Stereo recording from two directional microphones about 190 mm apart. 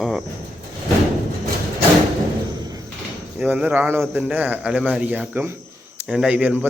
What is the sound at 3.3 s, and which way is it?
Speech, 5° right (ahead or behind).